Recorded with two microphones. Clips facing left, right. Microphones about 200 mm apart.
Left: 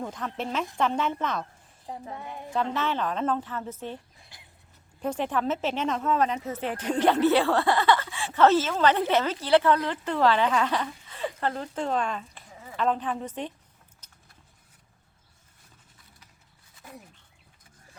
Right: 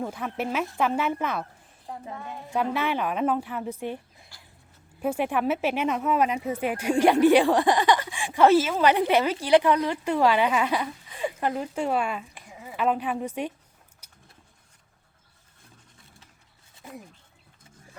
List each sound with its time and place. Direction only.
0.0 s speech: 10° right (ahead or behind)
1.9 s a woman's voice: 15° left (ahead or behind)
2.5 s speech: 10° right (ahead or behind)
4.3 s a sound: 20° left (ahead or behind)
4.9 s speech: 10° right (ahead or behind)
14.0 s vehicle: 10° right (ahead or behind)